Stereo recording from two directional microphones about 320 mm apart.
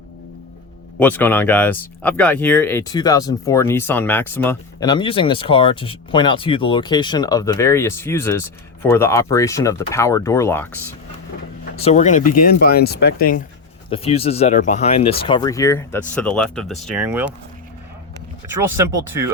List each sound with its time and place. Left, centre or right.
0.9 s speech: centre
11.8 s speech: left; by 17.3 s centre